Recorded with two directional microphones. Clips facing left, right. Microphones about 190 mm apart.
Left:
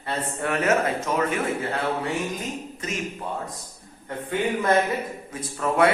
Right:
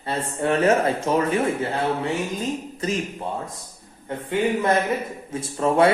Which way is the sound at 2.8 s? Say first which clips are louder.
Right 7 dB; 35° right (ahead or behind).